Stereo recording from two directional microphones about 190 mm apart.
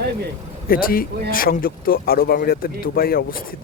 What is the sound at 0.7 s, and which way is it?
Speech, 50° left (ahead or behind).